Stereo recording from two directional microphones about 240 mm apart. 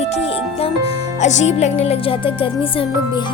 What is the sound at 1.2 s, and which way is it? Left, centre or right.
Speech, left.